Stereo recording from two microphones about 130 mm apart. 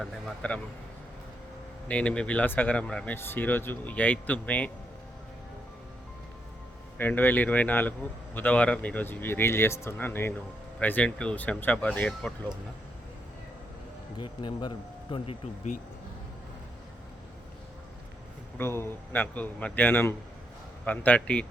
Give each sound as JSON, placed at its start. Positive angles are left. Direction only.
{"t": 0.0, "sound": "speech", "side_deg": 10}
{"t": 1.9, "sound": "speech", "side_deg": 10}
{"t": 7.0, "sound": "speech", "side_deg": 15}
{"t": 14.2, "sound": "speech", "side_deg": 35}
{"t": 18.5, "sound": "speech", "side_deg": 20}